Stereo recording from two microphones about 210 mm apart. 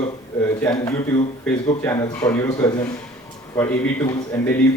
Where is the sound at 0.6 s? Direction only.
15° left (ahead or behind).